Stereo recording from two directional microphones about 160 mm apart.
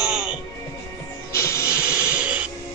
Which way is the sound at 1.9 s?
10° right (ahead or behind).